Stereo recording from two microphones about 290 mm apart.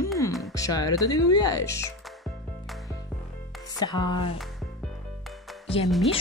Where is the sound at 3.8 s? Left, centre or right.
Centre.